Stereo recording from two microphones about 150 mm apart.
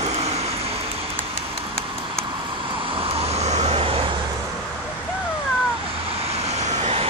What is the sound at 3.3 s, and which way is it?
Vehicle, 45° right (ahead or behind).